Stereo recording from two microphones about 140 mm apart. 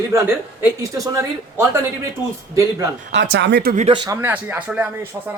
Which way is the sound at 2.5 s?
20° right (ahead or behind).